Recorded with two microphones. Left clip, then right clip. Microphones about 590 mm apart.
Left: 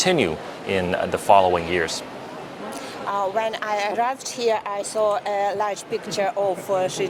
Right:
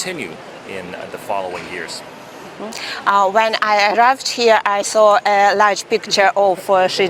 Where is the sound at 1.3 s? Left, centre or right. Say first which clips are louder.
Left 7 dB; left.